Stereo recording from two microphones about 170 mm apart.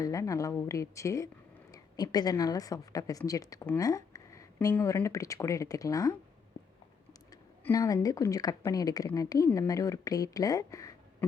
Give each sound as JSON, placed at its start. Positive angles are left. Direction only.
{"t": 0.0, "sound": "a woman's voice", "side_deg": 20}
{"t": 7.6, "sound": "a woman's voice", "side_deg": 20}